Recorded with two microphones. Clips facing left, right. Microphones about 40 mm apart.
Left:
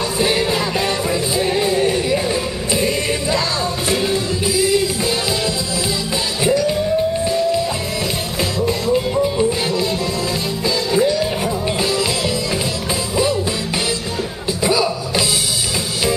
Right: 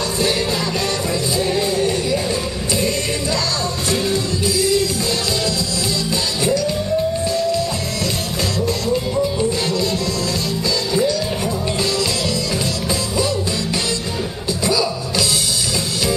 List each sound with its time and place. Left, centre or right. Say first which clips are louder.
0.2 s music: left 3 dB; left
6.4 s music: left 3 dB; centre
8.5 s music: left 3 dB; centre
10.9 s music: left 3 dB; centre
14.6 s music: left 2 dB; left